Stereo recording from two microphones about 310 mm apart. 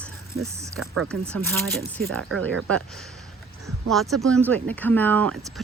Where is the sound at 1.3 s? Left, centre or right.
Centre.